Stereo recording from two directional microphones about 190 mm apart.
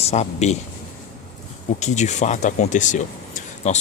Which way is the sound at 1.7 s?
35° left (ahead or behind).